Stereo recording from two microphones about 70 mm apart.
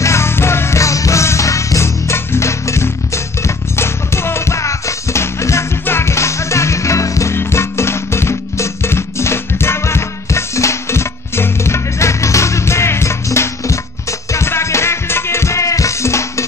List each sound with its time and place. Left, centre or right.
0.0 s music: left